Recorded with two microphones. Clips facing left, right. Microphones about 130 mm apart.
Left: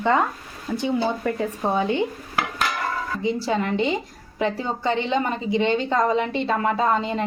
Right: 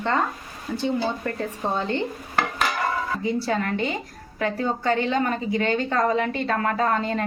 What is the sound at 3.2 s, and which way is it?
A woman's voice, 20° left (ahead or behind).